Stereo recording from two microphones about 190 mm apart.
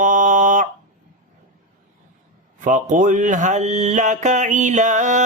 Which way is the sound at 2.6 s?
40° right (ahead or behind).